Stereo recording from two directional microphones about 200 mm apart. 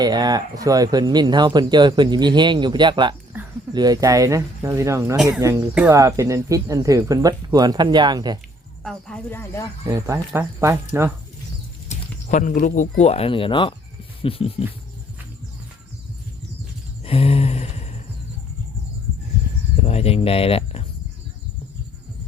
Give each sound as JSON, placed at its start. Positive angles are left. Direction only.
{"t": 0.0, "sound": "speech", "side_deg": -20}
{"t": 5.1, "sound": "speech", "side_deg": -5}
{"t": 5.4, "sound": "speech", "side_deg": -15}
{"t": 8.8, "sound": "speech", "side_deg": 5}
{"t": 9.8, "sound": "speech", "side_deg": -15}
{"t": 11.9, "sound": "speech", "side_deg": 40}
{"t": 14.2, "sound": "a sound", "side_deg": 30}
{"t": 17.0, "sound": "a sound", "side_deg": 30}
{"t": 19.8, "sound": "speech", "side_deg": 30}